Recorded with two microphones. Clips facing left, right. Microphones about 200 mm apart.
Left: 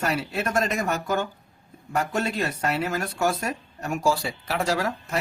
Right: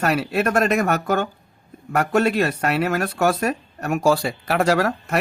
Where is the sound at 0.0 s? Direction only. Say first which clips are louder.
Right 6 dB; 65° right (ahead or behind).